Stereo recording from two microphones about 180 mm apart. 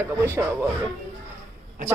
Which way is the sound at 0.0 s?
15° right (ahead or behind).